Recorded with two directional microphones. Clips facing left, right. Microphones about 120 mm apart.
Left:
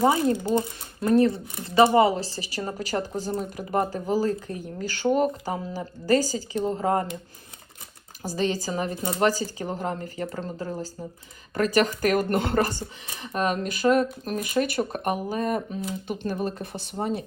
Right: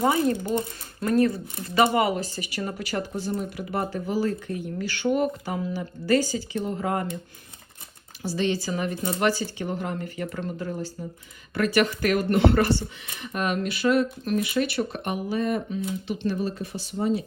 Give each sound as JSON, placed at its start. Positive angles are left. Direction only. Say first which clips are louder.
{"t": 0.0, "sound": "speech", "louder": "left 1 dB", "side_deg": 25}
{"t": 8.2, "sound": "speech", "louder": "right 1 dB", "side_deg": 40}
{"t": 9.4, "sound": "speech", "louder": "even", "side_deg": 35}